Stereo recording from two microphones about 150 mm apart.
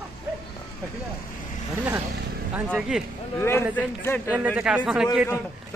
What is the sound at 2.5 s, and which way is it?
Speech, 10° right (ahead or behind).